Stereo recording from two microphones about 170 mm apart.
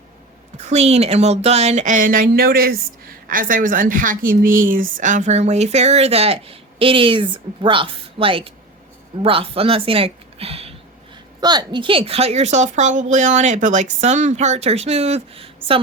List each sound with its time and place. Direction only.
0.6 s a woman's voice: 40° right (ahead or behind)
11.3 s a woman's voice: 25° right (ahead or behind)